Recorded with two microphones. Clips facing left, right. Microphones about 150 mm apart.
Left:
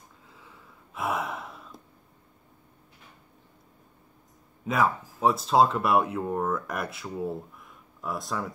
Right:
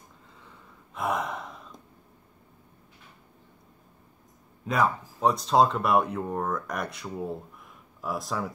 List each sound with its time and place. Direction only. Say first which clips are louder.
0.4 s gasp: even; 5° left (ahead or behind)
4.6 s speech: even; 5° left (ahead or behind)